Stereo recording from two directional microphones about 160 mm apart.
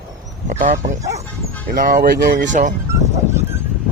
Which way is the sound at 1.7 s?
60° right (ahead or behind).